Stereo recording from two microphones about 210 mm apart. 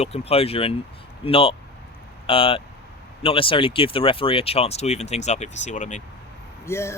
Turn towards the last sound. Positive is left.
turn(degrees=15)  # may be behind; listen again after turning